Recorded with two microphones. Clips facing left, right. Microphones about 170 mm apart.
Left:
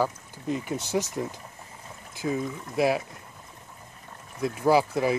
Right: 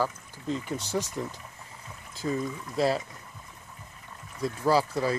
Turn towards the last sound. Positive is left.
turn(degrees=15)  # may be behind; listen again after turning